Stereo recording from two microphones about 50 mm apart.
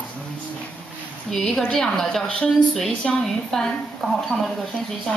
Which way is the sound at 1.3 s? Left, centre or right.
Centre.